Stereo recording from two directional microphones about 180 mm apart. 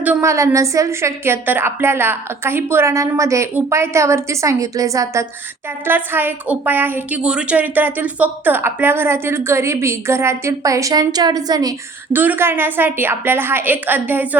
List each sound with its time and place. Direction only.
0.0 s a woman's voice: 10° right (ahead or behind)
12.1 s a woman's voice: 10° right (ahead or behind)